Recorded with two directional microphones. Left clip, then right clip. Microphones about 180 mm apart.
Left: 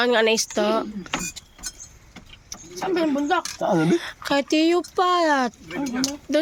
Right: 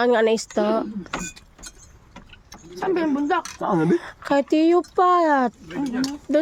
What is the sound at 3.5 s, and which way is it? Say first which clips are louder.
Speech: left 1 dB; 30° left (ahead or behind).